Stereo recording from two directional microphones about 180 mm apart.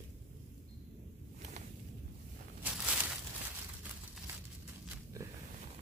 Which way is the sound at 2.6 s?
5° right (ahead or behind).